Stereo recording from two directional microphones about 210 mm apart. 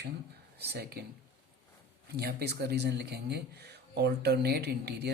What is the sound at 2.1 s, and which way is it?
Speech, 50° right (ahead or behind).